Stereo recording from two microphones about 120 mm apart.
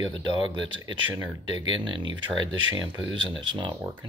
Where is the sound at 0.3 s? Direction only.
40° right (ahead or behind).